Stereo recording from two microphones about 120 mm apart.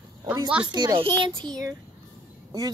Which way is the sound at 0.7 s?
35° right (ahead or behind).